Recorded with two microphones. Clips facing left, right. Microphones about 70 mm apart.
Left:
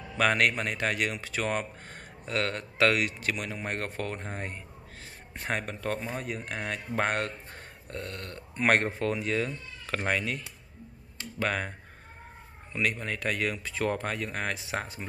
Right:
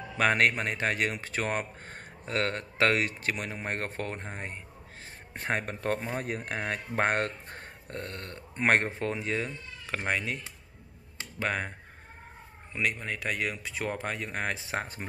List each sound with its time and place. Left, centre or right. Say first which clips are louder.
0.2 s speech: even; right
4.3 s speech: left 2 dB; centre
5.3 s speech: right 1 dB; right
12.7 s speech: left 1 dB; centre